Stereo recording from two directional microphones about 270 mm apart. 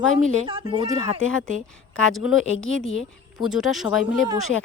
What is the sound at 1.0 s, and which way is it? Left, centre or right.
Speech, left.